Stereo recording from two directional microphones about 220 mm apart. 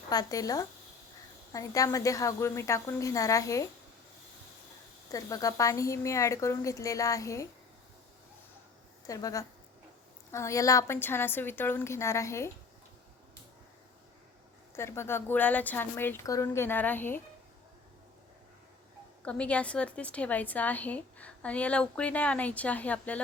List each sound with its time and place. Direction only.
0.1 s a woman's voice: 15° left (ahead or behind)
5.1 s a woman's voice: 15° left (ahead or behind)
9.0 s a woman's voice: 15° left (ahead or behind)
14.8 s a woman's voice: 10° left (ahead or behind)
19.2 s a woman's voice: 5° left (ahead or behind)